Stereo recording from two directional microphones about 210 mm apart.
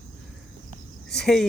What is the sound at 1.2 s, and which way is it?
Speech, centre (ahead or behind).